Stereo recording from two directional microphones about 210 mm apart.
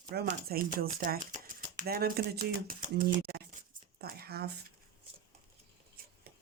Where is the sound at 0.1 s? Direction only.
50° right (ahead or behind).